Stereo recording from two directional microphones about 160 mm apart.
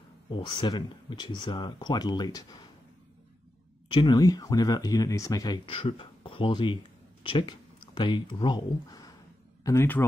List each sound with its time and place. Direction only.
0.3 s speech: 30° left (ahead or behind)
3.9 s speech: 30° left (ahead or behind)